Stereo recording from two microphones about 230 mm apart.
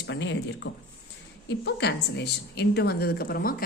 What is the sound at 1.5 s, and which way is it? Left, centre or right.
A woman's voice, left.